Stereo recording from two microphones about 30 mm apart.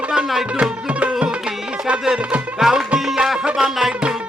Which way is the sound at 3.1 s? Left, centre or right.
Centre.